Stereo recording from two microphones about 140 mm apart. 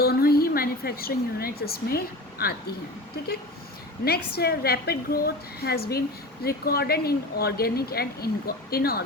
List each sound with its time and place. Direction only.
0.0 s a woman's voice: 90° left
4.0 s speech: 90° left